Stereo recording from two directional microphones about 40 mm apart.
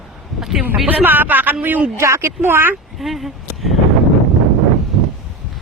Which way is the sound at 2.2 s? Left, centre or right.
Right.